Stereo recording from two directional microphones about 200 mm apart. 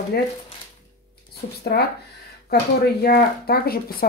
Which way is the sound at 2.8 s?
50° left (ahead or behind).